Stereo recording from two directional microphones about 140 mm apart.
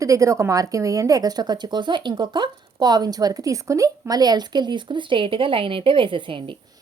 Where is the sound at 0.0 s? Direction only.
20° right (ahead or behind).